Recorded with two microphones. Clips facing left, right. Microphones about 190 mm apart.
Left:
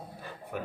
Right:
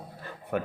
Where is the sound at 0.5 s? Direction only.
65° right (ahead or behind).